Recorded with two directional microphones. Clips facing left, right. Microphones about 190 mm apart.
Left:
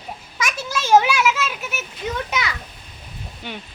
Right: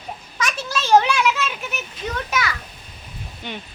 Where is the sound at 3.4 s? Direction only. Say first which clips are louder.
Right 1 dB; 10° left (ahead or behind).